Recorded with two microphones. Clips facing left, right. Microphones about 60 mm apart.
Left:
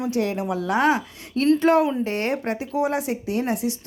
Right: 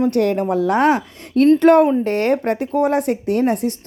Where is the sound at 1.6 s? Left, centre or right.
Right.